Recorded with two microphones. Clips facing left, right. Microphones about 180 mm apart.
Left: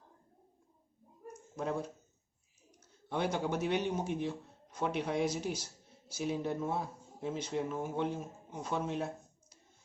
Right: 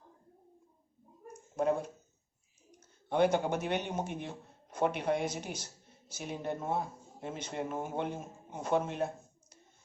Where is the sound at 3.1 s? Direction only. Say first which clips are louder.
Right 5 dB; 55° right (ahead or behind).